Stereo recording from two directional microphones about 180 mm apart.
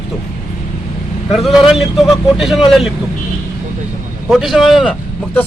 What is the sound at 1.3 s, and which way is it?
Speech, centre (ahead or behind).